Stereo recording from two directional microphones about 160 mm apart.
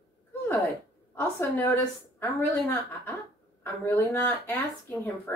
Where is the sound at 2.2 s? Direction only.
15° left (ahead or behind).